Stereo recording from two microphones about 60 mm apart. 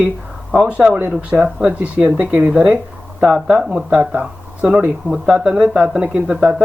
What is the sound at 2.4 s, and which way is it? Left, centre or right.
Speech, centre.